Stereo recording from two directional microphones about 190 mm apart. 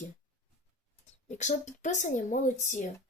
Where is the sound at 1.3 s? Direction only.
40° left (ahead or behind).